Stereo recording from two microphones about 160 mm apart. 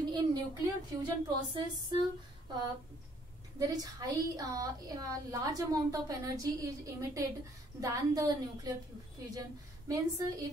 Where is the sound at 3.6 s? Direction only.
25° right (ahead or behind).